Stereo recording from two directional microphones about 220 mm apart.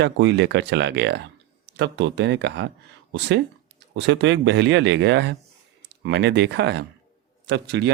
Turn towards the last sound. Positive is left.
turn(degrees=-50)  # may be behind; listen again after turning